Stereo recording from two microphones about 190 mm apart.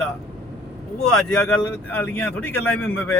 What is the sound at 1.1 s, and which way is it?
Speech, 5° left (ahead or behind).